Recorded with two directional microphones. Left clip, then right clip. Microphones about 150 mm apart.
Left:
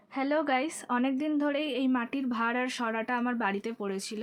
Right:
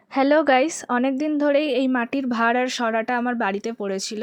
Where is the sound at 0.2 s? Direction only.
60° right (ahead or behind).